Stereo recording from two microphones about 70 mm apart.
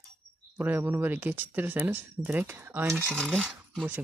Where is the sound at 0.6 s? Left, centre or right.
Right.